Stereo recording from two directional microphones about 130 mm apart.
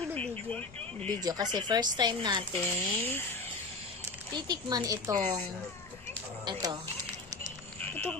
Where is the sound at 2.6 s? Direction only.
15° left (ahead or behind).